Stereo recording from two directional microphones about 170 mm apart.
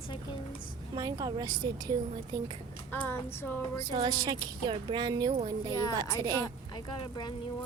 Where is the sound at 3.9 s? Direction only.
25° right (ahead or behind).